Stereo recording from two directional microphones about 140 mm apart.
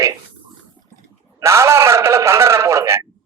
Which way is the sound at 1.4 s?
20° right (ahead or behind).